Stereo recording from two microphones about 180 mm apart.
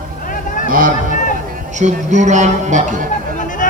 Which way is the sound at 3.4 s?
45° left (ahead or behind).